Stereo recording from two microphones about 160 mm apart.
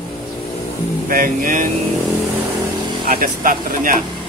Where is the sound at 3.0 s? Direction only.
60° right (ahead or behind).